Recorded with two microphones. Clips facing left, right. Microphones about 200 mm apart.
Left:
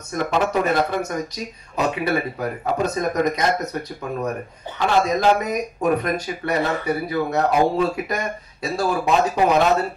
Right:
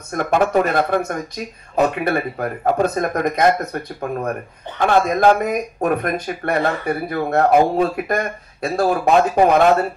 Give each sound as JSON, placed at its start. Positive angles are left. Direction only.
{"t": 0.1, "sound": "speech", "side_deg": -50}
{"t": 4.7, "sound": "speech", "side_deg": -55}